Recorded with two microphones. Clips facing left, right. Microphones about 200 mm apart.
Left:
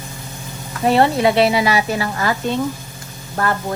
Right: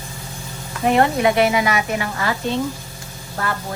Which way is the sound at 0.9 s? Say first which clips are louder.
Left 2 dB; 30° left (ahead or behind).